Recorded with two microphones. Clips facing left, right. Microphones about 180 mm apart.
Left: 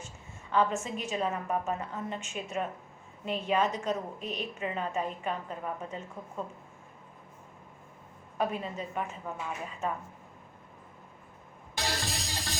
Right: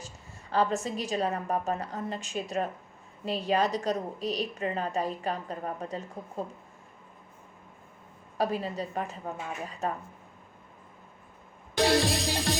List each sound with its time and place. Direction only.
0.5 s a woman's voice: 35° right (ahead or behind)
8.4 s a woman's voice: 35° right (ahead or behind)
11.9 s music: 75° right (ahead or behind)